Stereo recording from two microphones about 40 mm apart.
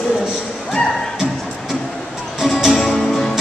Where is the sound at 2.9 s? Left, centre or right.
Left.